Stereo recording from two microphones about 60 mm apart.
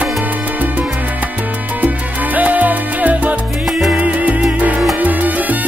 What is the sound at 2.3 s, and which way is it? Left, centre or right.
Salsa music, right.